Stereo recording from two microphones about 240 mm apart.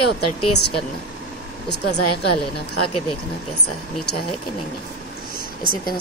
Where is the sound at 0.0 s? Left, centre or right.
Left.